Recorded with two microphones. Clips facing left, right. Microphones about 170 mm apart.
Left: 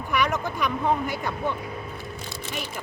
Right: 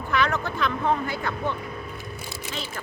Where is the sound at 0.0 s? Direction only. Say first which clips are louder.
Even; 15° left (ahead or behind).